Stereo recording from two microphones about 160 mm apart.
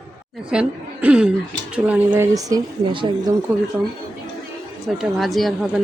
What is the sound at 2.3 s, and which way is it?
Speech, 25° right (ahead or behind).